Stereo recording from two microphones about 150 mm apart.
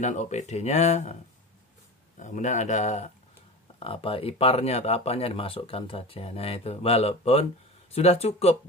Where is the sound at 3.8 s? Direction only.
40° left (ahead or behind).